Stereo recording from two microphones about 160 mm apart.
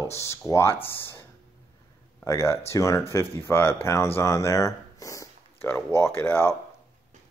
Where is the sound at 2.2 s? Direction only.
20° left (ahead or behind).